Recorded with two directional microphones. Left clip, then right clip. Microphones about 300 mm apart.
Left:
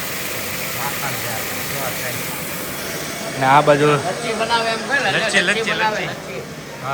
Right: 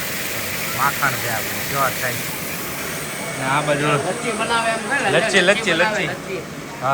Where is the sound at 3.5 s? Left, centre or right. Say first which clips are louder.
Left 6 dB; centre.